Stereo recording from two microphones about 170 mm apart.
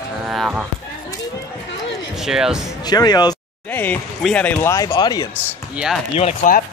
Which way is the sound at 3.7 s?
10° left (ahead or behind).